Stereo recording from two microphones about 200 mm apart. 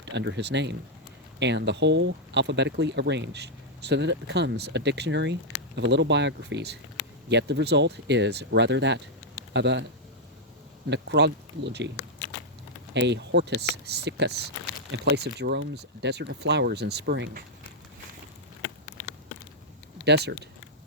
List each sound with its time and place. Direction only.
0.0 s speech: 60° right (ahead or behind)
10.8 s speech: 60° right (ahead or behind)
12.9 s speech: 60° right (ahead or behind)
20.1 s speech: 55° right (ahead or behind)